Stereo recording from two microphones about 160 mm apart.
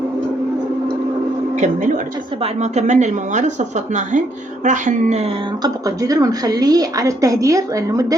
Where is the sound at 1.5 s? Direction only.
50° right (ahead or behind).